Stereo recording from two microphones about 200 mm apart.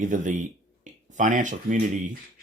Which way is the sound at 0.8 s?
40° right (ahead or behind).